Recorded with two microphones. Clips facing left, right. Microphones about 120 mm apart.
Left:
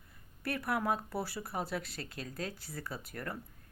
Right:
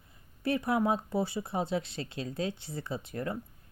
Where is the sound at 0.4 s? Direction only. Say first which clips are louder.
Right 5 dB; 25° right (ahead or behind).